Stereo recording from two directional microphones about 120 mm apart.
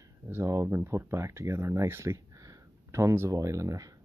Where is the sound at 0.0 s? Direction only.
25° right (ahead or behind).